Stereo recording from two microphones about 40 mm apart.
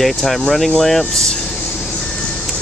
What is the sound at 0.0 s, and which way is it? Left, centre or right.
Speech, centre.